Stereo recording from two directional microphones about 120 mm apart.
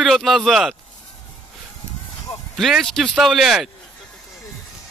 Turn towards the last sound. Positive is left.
turn(degrees=0)  # may be behind; listen again after turning